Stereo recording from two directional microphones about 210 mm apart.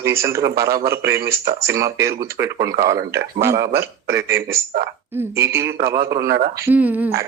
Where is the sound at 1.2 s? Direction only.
50° right (ahead or behind).